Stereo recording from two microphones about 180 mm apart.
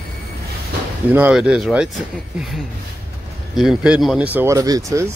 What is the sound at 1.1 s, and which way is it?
Speech, 10° right (ahead or behind).